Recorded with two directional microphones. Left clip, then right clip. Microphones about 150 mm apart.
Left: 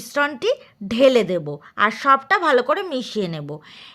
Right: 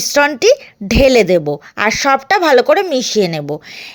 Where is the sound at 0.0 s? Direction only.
30° right (ahead or behind).